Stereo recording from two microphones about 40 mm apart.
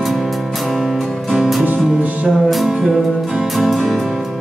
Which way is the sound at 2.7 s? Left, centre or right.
Right.